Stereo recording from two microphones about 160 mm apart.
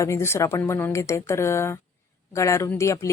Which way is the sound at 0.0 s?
15° left (ahead or behind).